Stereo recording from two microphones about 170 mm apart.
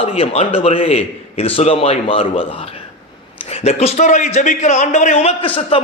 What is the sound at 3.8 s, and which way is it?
A man's voice, 40° left (ahead or behind).